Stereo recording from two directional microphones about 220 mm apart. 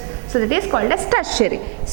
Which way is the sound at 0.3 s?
15° right (ahead or behind).